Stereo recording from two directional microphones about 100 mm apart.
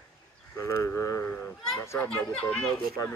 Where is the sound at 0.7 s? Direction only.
35° left (ahead or behind).